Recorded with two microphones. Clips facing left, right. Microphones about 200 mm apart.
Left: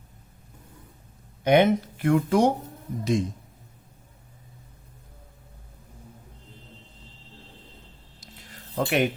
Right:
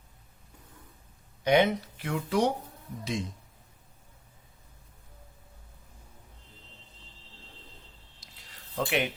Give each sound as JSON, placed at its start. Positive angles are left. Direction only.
{"t": 1.5, "sound": "speech", "side_deg": 50}
{"t": 8.2, "sound": "a sound", "side_deg": 50}
{"t": 8.9, "sound": "speech", "side_deg": 45}